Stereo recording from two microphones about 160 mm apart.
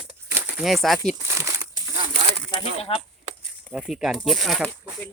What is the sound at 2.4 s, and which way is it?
Speech, 30° left (ahead or behind).